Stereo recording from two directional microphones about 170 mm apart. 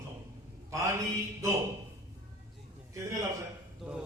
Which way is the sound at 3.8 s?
5° right (ahead or behind).